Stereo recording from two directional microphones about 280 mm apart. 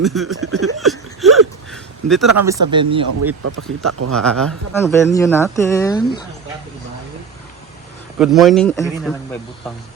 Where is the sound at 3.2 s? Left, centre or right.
Right.